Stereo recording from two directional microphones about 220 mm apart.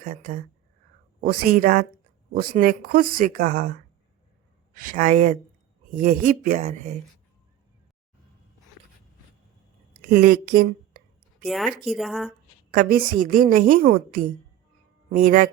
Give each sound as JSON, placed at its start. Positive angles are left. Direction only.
{"t": 0.0, "sound": "a woman's voice", "side_deg": -35}
{"t": 4.7, "sound": "a woman's voice", "side_deg": -40}
{"t": 10.1, "sound": "a sound", "side_deg": -45}
{"t": 11.4, "sound": "speech", "side_deg": 0}
{"t": 12.7, "sound": "a woman's voice", "side_deg": -40}